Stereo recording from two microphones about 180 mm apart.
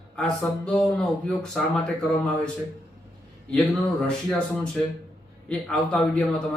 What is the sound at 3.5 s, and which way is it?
Speech, 5° left (ahead or behind).